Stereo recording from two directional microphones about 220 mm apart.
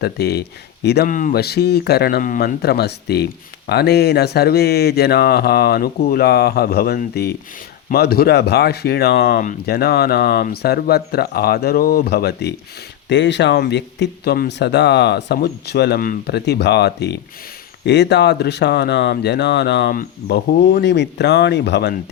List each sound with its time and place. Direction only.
0.0 s speech: 45° left (ahead or behind)